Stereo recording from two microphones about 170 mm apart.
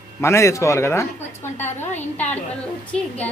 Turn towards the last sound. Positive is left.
turn(degrees=10)  # may be behind; listen again after turning